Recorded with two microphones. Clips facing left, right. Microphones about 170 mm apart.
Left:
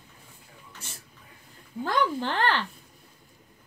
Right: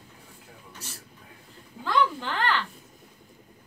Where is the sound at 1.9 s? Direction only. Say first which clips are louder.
Right 1 dB; 40° left (ahead or behind).